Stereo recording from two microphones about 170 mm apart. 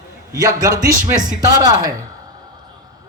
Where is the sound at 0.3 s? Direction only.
20° right (ahead or behind).